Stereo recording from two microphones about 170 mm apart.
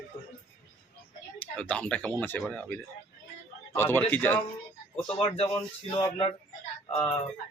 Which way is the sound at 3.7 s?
10° left (ahead or behind).